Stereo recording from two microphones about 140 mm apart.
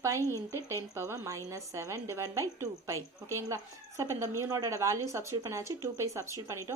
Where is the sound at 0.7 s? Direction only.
20° right (ahead or behind).